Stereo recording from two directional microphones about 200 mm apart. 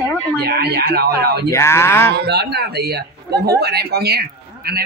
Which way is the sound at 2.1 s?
55° right (ahead or behind).